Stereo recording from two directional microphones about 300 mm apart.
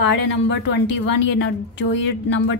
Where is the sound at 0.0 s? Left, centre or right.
Left.